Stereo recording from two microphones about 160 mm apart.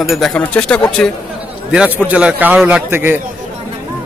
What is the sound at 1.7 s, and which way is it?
A man's voice, 10° right (ahead or behind).